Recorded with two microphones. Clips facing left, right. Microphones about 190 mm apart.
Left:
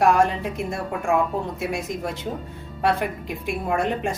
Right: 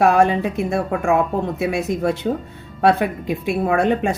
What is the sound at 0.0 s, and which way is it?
Speech, 70° right (ahead or behind).